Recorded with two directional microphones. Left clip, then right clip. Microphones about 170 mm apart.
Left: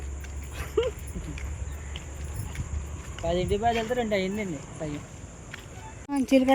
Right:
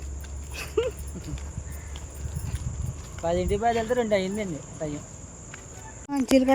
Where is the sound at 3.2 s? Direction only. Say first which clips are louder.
Right 1 dB; 30° right (ahead or behind).